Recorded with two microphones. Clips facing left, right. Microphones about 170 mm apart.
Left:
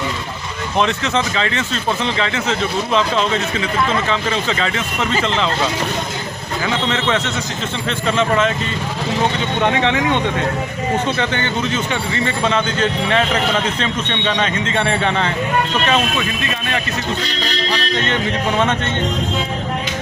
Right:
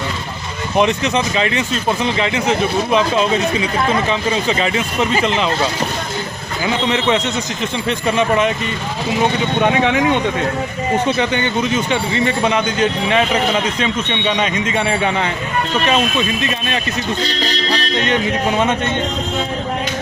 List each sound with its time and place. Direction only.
0.8 s speech: 15° right (ahead or behind)
6.7 s speech: 15° right (ahead or behind)
9.6 s speech: 15° right (ahead or behind)